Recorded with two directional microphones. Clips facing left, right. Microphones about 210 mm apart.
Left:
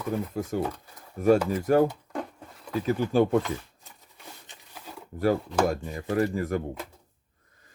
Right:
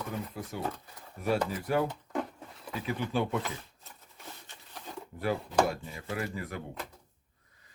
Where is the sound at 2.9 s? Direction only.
40° left (ahead or behind).